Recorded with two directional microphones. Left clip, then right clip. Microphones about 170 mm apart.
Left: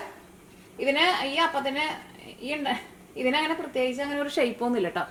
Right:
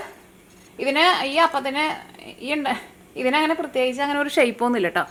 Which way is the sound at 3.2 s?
20° right (ahead or behind).